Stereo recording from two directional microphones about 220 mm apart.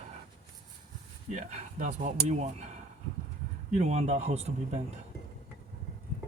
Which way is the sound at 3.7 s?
30° right (ahead or behind).